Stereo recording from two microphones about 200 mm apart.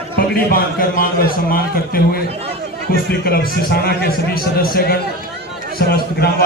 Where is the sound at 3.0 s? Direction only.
50° left (ahead or behind).